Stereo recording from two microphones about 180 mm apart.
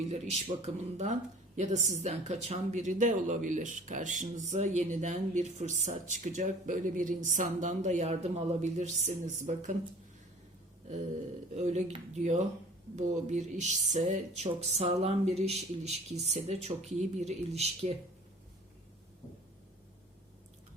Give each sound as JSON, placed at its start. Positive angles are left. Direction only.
{"t": 0.1, "sound": "speech", "side_deg": -35}
{"t": 11.5, "sound": "speech", "side_deg": -40}